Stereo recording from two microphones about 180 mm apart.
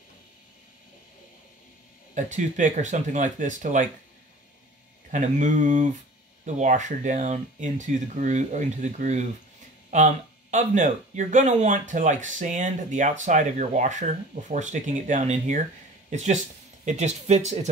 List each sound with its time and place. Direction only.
2.1 s speech: 40° right (ahead or behind)
5.1 s speech: 45° right (ahead or behind)